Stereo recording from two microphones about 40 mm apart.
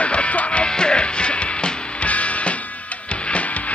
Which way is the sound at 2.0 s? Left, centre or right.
Left.